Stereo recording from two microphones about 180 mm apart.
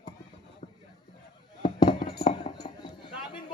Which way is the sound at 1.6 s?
25° left (ahead or behind).